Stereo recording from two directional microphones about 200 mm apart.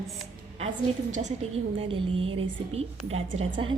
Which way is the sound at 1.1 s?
35° right (ahead or behind).